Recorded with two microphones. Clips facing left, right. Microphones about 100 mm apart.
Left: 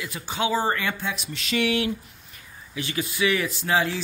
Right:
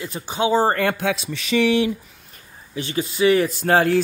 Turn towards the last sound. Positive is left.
turn(degrees=-50)  # may be behind; listen again after turning